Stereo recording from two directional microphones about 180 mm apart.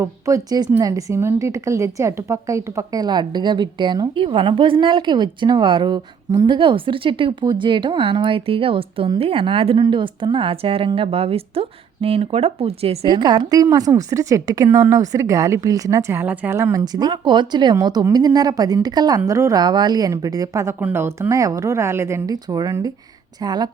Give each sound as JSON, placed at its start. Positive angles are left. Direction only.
{"t": 0.0, "sound": "a woman's voice", "side_deg": -20}